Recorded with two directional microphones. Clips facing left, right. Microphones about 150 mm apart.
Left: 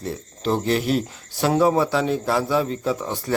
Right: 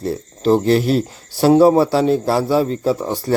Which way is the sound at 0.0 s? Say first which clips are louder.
Right 7 dB; 35° right (ahead or behind).